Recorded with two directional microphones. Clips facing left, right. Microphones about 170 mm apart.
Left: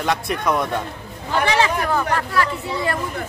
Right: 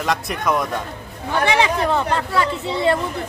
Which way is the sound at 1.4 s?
15° right (ahead or behind).